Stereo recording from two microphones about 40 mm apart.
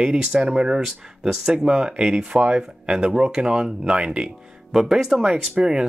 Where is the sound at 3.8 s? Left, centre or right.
Right.